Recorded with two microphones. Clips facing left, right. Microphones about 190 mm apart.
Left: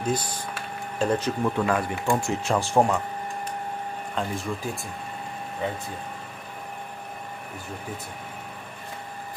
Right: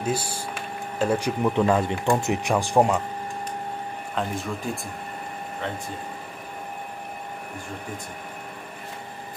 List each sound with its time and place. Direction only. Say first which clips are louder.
0.0 s speech: even; 10° right (ahead or behind)
4.1 s speech: right 1 dB; centre (ahead or behind)